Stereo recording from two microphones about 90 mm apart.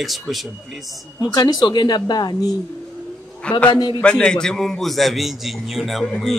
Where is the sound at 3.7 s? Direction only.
55° left (ahead or behind).